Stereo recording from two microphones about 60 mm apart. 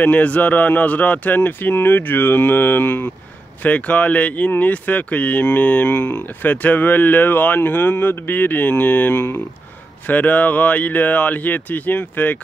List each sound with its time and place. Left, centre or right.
0.0 s speech: left
10.0 s speech: left